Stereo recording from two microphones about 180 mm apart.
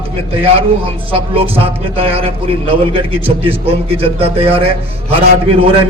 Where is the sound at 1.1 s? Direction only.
30° right (ahead or behind).